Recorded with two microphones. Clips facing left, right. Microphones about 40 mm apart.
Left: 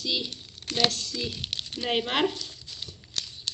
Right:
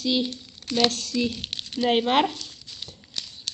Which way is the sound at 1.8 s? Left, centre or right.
Right.